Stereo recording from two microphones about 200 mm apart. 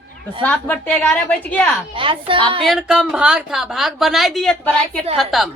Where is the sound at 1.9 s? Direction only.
25° right (ahead or behind).